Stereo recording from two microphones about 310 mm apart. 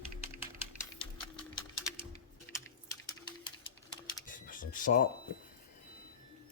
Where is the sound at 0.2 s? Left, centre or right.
Centre.